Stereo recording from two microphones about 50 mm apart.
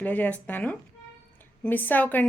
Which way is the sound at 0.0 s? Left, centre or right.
Left.